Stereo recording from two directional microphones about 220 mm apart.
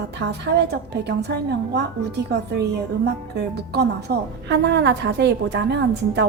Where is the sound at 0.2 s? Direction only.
50° right (ahead or behind).